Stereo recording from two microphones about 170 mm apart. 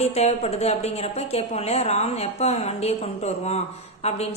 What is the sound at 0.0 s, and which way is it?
A woman's voice, 40° left (ahead or behind).